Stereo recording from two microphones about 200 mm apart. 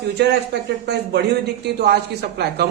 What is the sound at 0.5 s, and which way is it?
A woman's voice, 55° right (ahead or behind).